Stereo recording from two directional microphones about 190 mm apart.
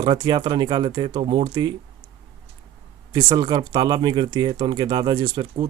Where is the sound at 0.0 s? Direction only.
25° right (ahead or behind).